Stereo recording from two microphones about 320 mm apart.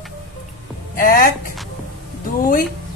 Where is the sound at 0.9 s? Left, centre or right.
Left.